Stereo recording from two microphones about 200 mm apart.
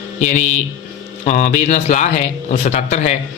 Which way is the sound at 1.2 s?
35° left (ahead or behind).